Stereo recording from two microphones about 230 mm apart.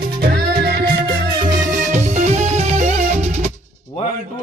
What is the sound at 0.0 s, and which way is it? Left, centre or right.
Music, right.